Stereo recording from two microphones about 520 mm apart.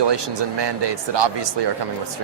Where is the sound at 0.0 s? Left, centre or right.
Right.